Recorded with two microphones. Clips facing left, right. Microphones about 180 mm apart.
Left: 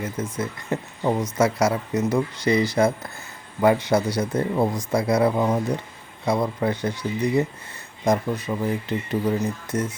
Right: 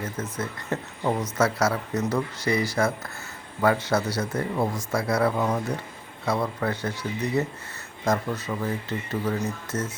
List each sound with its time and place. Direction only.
0.0 s speech: 10° left (ahead or behind)